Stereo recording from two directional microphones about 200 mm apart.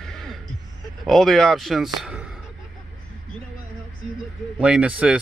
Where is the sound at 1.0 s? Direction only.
Centre (ahead or behind).